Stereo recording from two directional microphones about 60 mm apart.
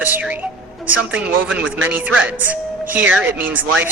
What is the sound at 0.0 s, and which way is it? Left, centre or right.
Speech, right.